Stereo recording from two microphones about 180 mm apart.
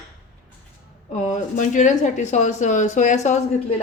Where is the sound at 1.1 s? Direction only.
40° left (ahead or behind).